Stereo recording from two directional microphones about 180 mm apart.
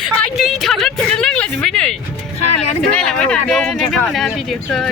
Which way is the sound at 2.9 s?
5° left (ahead or behind).